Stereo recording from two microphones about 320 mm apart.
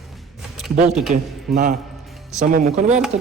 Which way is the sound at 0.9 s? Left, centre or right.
Centre.